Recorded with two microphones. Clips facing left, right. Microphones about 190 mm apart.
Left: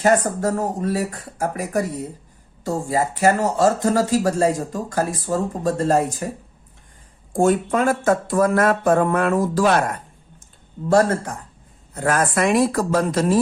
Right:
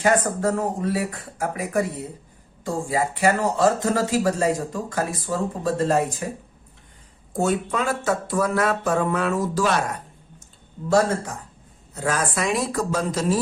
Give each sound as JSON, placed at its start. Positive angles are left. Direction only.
{"t": 0.0, "sound": "speech", "side_deg": 40}
{"t": 7.3, "sound": "speech", "side_deg": 45}
{"t": 10.8, "sound": "speech", "side_deg": 55}